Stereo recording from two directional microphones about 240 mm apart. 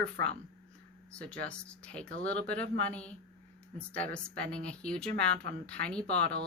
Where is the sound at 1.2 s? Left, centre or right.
Centre.